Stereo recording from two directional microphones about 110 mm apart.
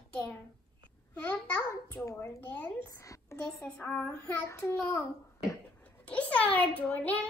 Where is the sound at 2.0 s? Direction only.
25° left (ahead or behind).